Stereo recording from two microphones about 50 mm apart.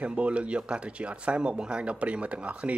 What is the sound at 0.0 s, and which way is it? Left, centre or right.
Speech, right.